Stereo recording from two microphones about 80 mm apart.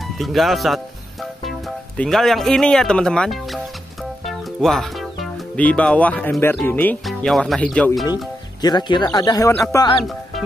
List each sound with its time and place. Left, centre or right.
0.2 s speech: centre
2.0 s speech: centre
4.3 s music: centre
5.6 s speech: centre
7.1 s speech: centre
7.6 s speech: centre
8.1 s speech: left
9.7 s speech: left